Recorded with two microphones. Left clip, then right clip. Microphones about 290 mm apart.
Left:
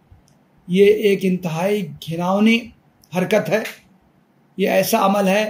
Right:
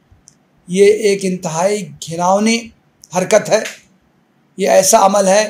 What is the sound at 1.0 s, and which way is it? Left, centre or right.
Speech, right.